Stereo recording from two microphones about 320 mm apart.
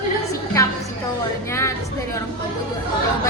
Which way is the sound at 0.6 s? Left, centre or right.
Centre.